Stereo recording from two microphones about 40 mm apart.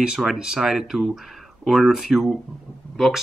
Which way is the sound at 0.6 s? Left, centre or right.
Centre.